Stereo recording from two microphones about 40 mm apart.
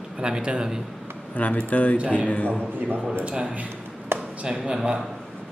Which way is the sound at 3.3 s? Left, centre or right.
Right.